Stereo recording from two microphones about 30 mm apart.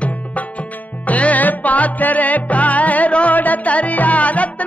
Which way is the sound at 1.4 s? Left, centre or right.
Left.